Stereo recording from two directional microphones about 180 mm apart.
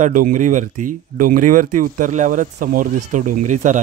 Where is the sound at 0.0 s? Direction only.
45° right (ahead or behind).